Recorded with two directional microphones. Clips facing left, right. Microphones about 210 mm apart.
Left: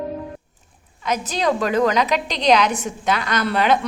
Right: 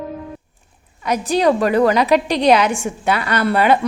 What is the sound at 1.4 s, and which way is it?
A woman's voice, 10° right (ahead or behind).